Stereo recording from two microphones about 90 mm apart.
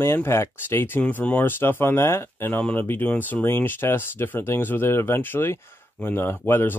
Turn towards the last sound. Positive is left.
turn(degrees=25)  # may be behind; listen again after turning